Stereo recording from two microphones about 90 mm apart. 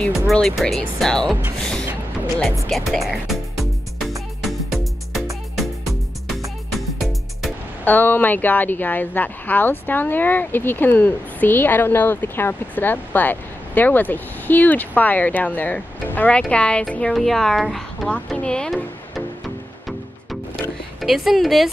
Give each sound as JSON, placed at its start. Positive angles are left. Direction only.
{"t": 0.3, "sound": "speech", "side_deg": 5}
{"t": 1.6, "sound": "a sound", "side_deg": 5}
{"t": 2.7, "sound": "speech", "side_deg": 0}
{"t": 4.4, "sound": "music", "side_deg": 0}
{"t": 6.7, "sound": "music", "side_deg": 0}
{"t": 7.8, "sound": "a woman's voice", "side_deg": 20}
{"t": 21.0, "sound": "speech", "side_deg": -5}